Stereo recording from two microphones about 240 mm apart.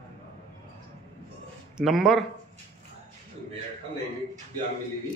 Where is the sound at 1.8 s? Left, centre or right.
Centre.